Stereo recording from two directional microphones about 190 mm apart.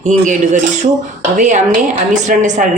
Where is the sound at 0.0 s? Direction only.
45° right (ahead or behind).